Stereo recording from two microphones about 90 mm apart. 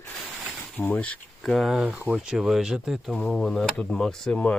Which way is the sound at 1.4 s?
Centre (ahead or behind).